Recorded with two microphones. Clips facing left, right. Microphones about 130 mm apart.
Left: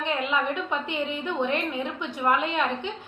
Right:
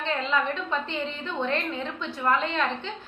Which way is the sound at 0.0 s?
15° left (ahead or behind).